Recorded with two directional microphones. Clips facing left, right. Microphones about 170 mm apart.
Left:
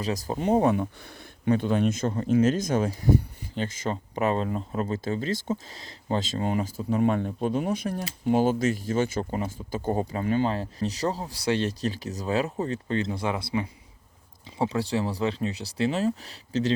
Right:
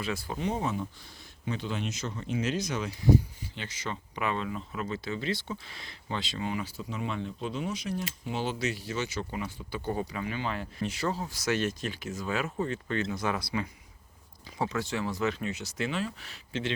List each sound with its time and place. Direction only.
0.0 s speech: 40° left (ahead or behind)